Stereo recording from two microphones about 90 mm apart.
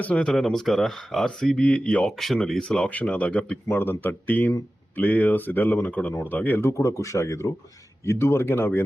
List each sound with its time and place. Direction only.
0.0 s speech: 15° left (ahead or behind)